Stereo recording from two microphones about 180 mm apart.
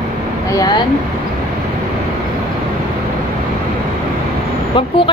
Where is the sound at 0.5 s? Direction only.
20° left (ahead or behind).